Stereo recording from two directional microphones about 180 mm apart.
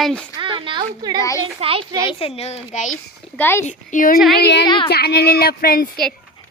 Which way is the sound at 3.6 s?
45° left (ahead or behind).